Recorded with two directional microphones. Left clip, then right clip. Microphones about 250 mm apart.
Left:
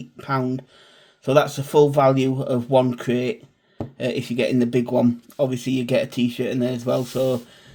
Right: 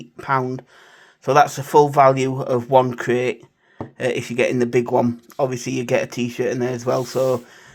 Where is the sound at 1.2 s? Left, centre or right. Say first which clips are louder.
Right 3 dB; centre.